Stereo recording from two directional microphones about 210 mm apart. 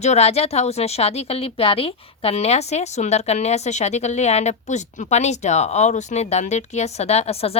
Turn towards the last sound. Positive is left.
turn(degrees=30)  # may be behind; listen again after turning